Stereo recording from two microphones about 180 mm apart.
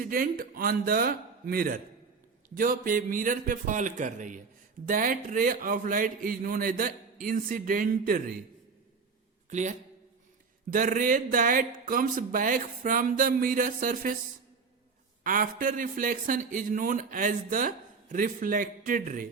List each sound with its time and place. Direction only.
0.0 s speech: 50° right (ahead or behind)
9.5 s a man's voice: 40° right (ahead or behind)
15.2 s speech: 50° right (ahead or behind)